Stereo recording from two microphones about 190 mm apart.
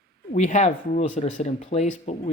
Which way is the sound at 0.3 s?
40° left (ahead or behind).